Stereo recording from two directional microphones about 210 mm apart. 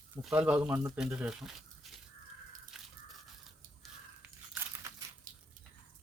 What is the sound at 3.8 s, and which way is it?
Biting, 10° right (ahead or behind).